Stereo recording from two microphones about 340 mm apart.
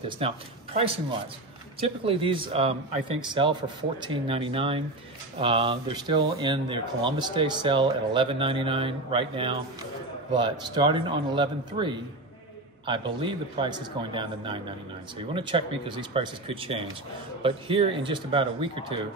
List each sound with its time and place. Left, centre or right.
0.2 s speech: centre
1.8 s speech: centre